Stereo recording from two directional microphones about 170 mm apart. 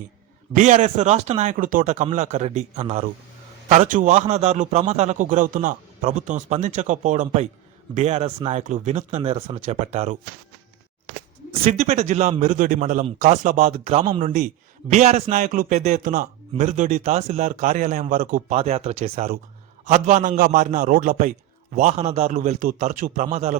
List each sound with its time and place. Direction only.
0.5 s speech: 45° right (ahead or behind)
11.6 s speech: 40° right (ahead or behind)
18.5 s speech: 40° right (ahead or behind)